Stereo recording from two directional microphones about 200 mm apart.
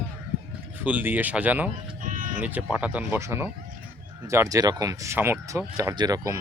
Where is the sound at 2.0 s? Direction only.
40° right (ahead or behind).